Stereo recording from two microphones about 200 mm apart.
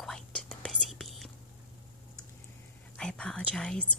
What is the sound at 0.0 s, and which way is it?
Whispering, 5° left (ahead or behind).